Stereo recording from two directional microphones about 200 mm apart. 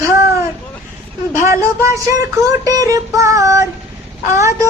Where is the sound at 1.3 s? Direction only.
15° right (ahead or behind).